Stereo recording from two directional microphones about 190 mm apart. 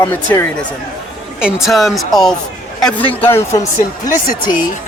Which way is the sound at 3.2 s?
15° left (ahead or behind).